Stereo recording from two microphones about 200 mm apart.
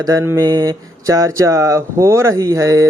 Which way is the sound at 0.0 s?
15° right (ahead or behind).